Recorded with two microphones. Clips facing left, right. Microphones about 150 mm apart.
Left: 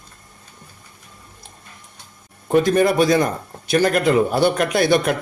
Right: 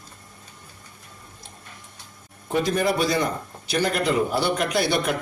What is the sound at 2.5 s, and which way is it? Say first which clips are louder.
A man's voice: left 7 dB; 60° left (ahead or behind).